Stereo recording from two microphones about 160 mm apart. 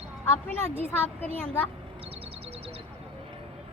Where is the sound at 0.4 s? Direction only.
10° left (ahead or behind).